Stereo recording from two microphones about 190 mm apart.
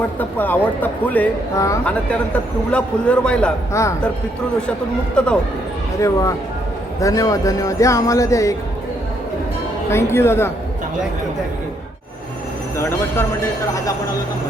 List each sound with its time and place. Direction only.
0.2 s a man's voice: 10° left (ahead or behind)
5.1 s a man's voice: 5° left (ahead or behind)
6.0 s speech: 15° left (ahead or behind)
9.9 s speech: 15° left (ahead or behind)
12.7 s speech: 15° left (ahead or behind)